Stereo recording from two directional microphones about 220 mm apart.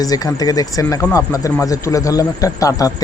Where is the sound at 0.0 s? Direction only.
15° left (ahead or behind).